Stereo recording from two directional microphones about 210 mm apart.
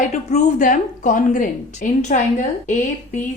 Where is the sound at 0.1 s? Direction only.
35° left (ahead or behind).